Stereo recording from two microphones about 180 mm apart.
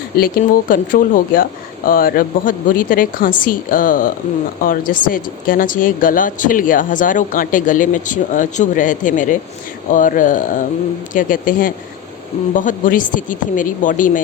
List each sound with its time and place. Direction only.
0.2 s speech: 50° left (ahead or behind)